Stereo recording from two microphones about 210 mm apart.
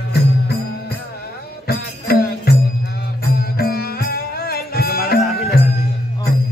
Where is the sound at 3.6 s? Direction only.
45° left (ahead or behind).